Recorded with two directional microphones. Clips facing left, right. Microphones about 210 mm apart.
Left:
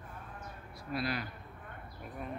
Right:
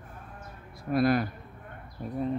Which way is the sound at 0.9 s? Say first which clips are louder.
Right 12 dB; 50° right (ahead or behind).